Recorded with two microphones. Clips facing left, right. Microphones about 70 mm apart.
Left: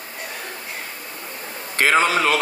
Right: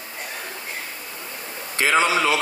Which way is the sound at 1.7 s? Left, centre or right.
Left.